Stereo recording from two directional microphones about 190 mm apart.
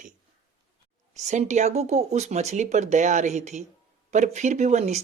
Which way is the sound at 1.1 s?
40° right (ahead or behind).